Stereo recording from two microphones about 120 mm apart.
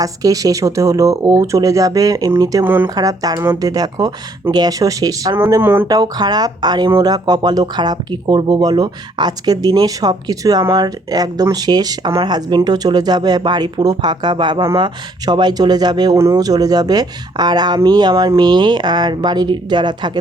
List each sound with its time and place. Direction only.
0.0 s speech: 30° right (ahead or behind)
5.9 s speech: 35° right (ahead or behind)